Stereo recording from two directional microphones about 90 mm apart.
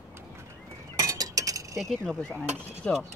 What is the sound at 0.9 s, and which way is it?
Cutlery, 40° right (ahead or behind).